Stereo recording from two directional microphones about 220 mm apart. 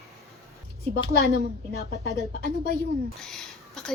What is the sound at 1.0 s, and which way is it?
A woman's voice, 50° left (ahead or behind).